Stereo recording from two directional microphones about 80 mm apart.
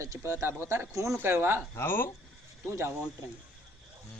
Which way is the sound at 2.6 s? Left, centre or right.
Right.